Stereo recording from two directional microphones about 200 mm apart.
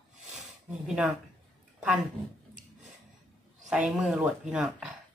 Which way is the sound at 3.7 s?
5° right (ahead or behind).